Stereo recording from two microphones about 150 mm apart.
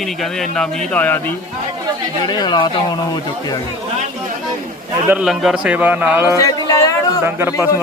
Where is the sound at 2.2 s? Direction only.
30° left (ahead or behind).